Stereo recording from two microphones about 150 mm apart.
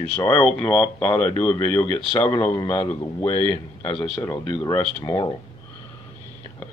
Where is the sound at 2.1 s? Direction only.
30° left (ahead or behind).